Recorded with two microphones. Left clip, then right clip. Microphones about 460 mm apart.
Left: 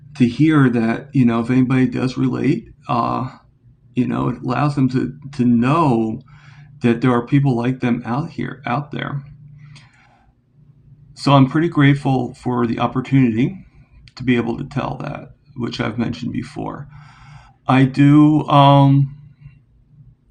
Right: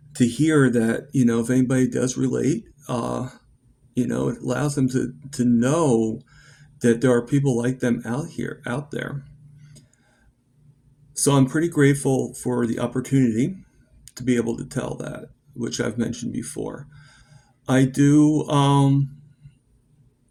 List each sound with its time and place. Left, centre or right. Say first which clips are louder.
0.3 s speech: left 3 dB; right
11.2 s speech: left 5 dB; right
17.7 s speech: left 5 dB; right